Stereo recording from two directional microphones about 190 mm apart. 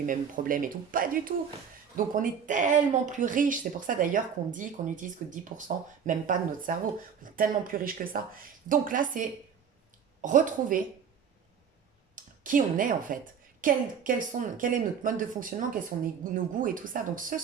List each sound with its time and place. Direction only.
0.0 s speech: 45° right (ahead or behind)
12.1 s speech: 45° right (ahead or behind)